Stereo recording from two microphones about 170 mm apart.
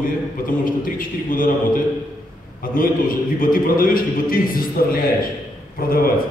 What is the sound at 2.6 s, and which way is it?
A man's voice, 55° left (ahead or behind).